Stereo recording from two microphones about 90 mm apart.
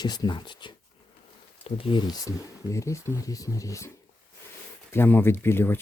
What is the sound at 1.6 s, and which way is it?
Speech, 80° left.